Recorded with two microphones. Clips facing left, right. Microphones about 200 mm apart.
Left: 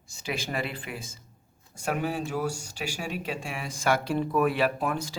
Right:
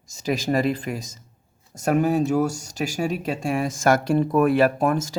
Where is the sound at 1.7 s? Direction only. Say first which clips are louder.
Right 9 dB; 45° right (ahead or behind).